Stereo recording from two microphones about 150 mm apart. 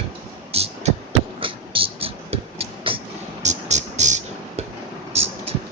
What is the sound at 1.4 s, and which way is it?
Music, 35° right (ahead or behind).